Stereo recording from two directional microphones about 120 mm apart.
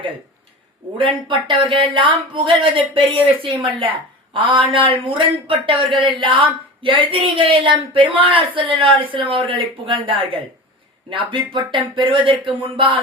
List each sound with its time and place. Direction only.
0.9 s speech: 45° right (ahead or behind)